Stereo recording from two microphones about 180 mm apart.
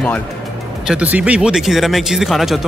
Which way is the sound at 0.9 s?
10° right (ahead or behind).